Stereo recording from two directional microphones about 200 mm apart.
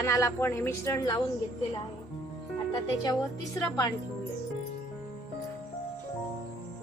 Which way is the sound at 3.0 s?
20° left (ahead or behind).